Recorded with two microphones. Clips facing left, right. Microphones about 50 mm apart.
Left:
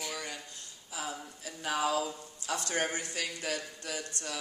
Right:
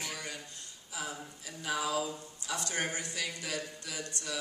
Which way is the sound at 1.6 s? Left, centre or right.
Left.